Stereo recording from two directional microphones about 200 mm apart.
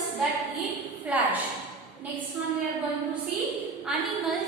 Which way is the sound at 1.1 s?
5° right (ahead or behind).